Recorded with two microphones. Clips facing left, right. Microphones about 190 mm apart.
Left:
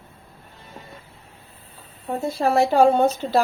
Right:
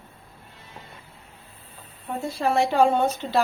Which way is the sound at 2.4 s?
40° left (ahead or behind).